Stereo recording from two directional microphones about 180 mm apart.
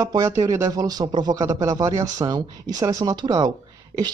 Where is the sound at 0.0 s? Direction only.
15° right (ahead or behind).